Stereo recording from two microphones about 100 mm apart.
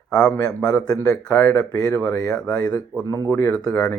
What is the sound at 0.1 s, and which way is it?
Speech, 10° left (ahead or behind).